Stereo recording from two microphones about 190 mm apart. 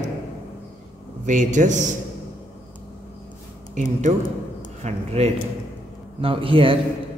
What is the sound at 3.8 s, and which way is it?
A man's voice, 40° right (ahead or behind).